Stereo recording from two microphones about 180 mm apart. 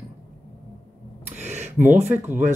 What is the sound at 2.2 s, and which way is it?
Speech, 40° right (ahead or behind).